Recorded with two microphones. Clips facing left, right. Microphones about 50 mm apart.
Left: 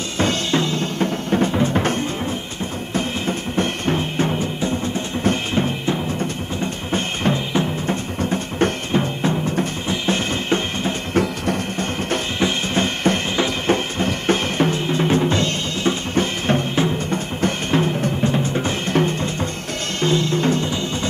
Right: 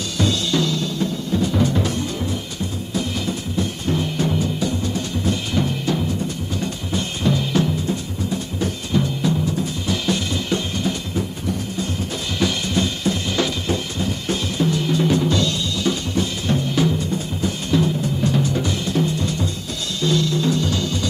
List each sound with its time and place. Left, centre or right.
0.2 s music: left
1.5 s music: left
7.8 s drum: left
8.9 s music: left
9.8 s drum kit: left
11.1 s music: left
12.4 s drum: left
17.0 s music: left
20.6 s music: left